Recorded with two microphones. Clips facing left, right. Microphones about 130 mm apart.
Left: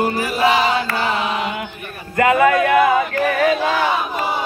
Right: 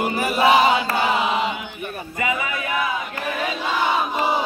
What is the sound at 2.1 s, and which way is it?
Speech, 65° left (ahead or behind).